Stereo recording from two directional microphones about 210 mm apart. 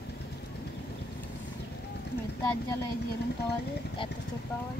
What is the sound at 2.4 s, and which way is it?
Speech, 15° left (ahead or behind).